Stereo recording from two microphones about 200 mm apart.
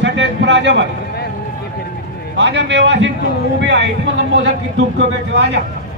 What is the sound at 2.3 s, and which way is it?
Speech, 65° right (ahead or behind).